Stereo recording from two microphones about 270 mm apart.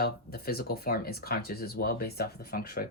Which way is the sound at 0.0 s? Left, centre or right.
Left.